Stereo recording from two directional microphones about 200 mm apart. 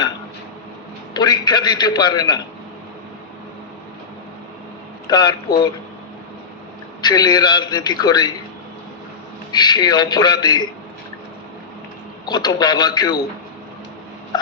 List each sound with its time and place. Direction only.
1.1 s a man's voice: 20° left (ahead or behind)
5.0 s a man's voice: 20° left (ahead or behind)
7.0 s a man's voice: 20° left (ahead or behind)
9.5 s a man's voice: 20° left (ahead or behind)
12.2 s a man's voice: 20° left (ahead or behind)